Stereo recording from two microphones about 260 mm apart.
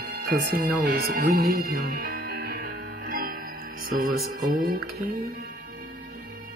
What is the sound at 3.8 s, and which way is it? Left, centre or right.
Speech, right.